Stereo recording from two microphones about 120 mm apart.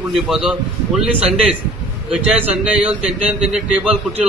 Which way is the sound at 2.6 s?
10° right (ahead or behind).